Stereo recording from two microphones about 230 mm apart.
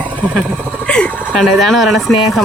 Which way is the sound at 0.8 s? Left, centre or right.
Centre.